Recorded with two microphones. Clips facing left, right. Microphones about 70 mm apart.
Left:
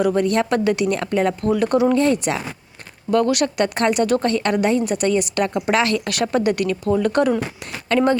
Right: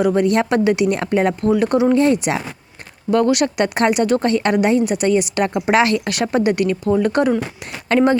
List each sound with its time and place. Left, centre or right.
0.0 s a woman's voice: centre
0.9 s speech: right
1.5 s a woman's voice: centre
1.9 s a woman's voice: centre